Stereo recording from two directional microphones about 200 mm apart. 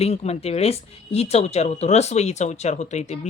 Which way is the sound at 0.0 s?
30° left (ahead or behind).